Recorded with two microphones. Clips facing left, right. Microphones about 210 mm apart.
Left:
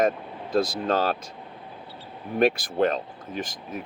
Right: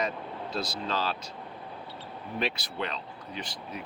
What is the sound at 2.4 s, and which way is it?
Speech, 50° left (ahead or behind).